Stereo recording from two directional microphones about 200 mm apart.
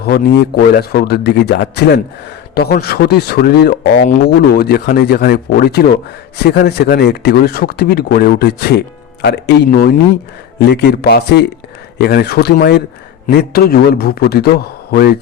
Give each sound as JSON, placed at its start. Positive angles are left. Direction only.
{"t": 0.1, "sound": "a man's voice", "side_deg": 55}